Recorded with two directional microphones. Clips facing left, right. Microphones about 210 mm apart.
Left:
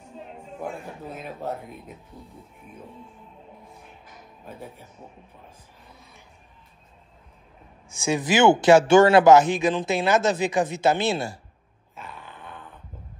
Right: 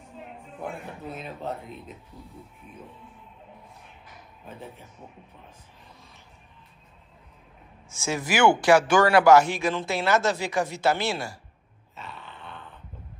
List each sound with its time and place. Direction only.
7.9 s speech: 15° left (ahead or behind)